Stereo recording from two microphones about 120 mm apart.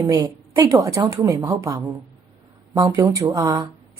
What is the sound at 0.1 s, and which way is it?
A woman's voice, 30° right (ahead or behind).